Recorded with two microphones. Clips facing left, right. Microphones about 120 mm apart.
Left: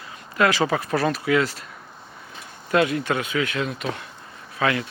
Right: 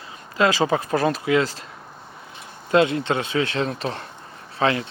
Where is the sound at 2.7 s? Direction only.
25° right (ahead or behind).